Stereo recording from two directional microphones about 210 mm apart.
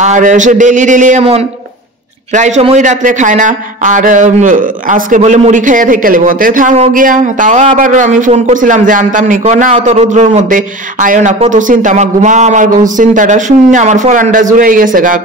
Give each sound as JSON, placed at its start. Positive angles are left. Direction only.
{"t": 0.0, "sound": "a man's voice", "side_deg": -35}